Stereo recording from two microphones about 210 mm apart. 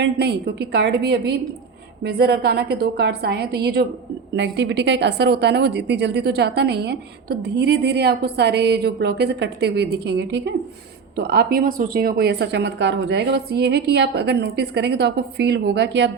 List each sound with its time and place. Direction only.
0.0 s a woman's voice: 50° right (ahead or behind)